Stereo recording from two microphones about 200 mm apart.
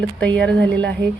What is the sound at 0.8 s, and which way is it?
Speech, 60° right (ahead or behind).